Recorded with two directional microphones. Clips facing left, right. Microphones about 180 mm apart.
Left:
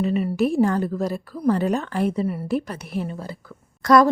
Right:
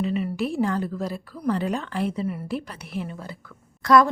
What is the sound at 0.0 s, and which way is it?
A woman's voice, 45° left (ahead or behind).